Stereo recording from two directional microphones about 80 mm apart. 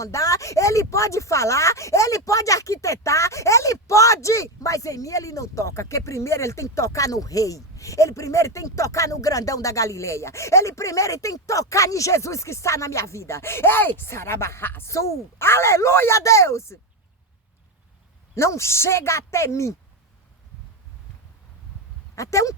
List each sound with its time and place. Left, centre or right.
0.0 s speech: left
18.3 s speech: left
22.1 s speech: left